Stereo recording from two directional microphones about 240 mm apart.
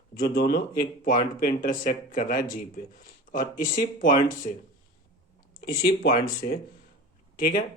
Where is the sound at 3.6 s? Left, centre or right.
Left.